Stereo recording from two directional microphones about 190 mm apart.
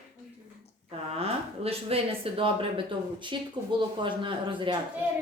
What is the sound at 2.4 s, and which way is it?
Speech, 30° right (ahead or behind).